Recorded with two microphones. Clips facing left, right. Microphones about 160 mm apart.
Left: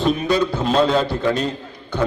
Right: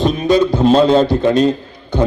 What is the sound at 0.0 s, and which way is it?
A man's voice, 20° right (ahead or behind).